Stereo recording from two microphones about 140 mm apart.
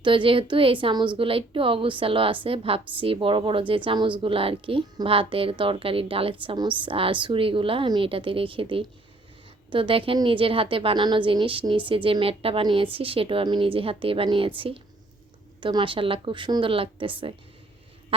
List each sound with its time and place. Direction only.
0.0 s speech: 35° right (ahead or behind)